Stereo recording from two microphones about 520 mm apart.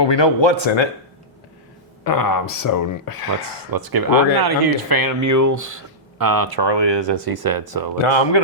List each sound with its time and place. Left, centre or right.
0.0 s speech: left
2.0 s speech: left
3.7 s speech: right
8.0 s speech: left